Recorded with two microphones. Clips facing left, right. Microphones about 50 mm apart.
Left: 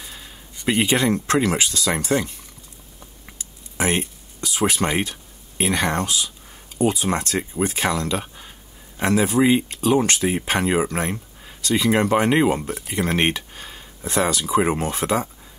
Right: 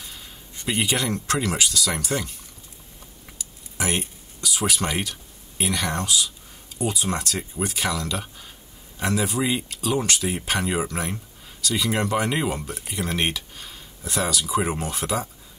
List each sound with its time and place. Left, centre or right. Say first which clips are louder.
0.0 s speech: left 2 dB; left
3.3 s a sound: left 1 dB; left
6.8 s speech: left 5 dB; left